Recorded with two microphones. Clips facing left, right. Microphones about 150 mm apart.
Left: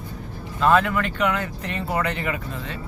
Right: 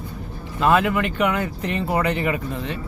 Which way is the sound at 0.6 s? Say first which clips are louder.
Right 1 dB; 10° right (ahead or behind).